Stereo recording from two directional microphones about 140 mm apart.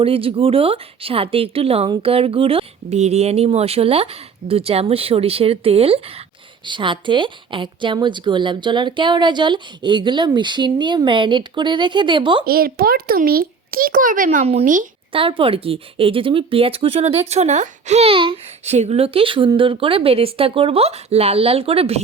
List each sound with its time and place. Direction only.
0.0 s a woman's voice: 40° right (ahead or behind)
12.5 s a child's voice: 90° right; by 14.8 s 70° right (ahead or behind)
15.1 s a woman's voice: 40° right (ahead or behind)
18.6 s speech: 50° right (ahead or behind)